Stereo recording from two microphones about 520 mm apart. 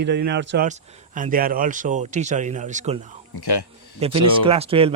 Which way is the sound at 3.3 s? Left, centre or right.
Left.